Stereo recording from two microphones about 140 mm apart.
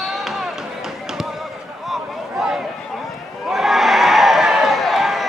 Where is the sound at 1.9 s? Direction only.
5° right (ahead or behind).